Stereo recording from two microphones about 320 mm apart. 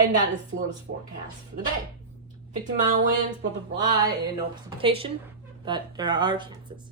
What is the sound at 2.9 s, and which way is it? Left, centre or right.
Music, right.